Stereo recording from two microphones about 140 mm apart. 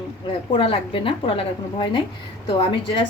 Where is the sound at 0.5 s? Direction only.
40° left (ahead or behind).